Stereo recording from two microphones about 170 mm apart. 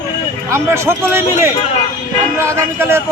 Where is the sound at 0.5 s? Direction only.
15° right (ahead or behind).